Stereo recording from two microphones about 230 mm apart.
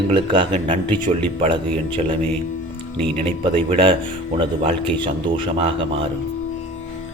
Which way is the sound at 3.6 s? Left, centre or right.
Right.